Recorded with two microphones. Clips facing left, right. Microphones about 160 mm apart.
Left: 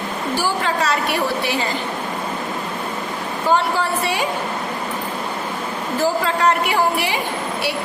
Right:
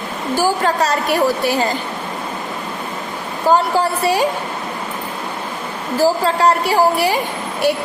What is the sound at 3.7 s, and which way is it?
Speech, 40° right (ahead or behind).